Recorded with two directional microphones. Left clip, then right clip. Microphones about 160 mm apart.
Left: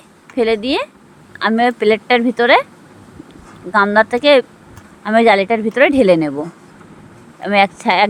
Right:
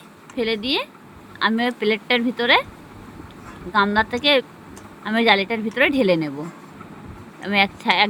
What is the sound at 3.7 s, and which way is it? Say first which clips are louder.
Speech: left 7 dB; 55° left (ahead or behind).